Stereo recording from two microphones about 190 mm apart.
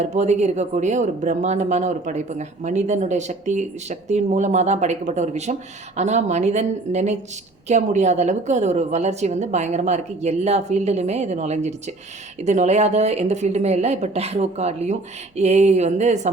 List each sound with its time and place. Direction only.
0.0 s speech: 35° right (ahead or behind)